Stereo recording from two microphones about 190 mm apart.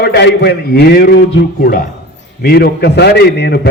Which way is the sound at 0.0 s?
60° left (ahead or behind).